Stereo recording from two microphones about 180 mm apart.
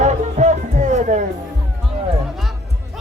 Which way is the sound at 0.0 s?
40° right (ahead or behind).